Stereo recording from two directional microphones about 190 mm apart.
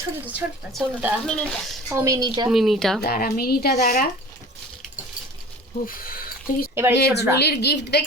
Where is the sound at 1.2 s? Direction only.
5° left (ahead or behind).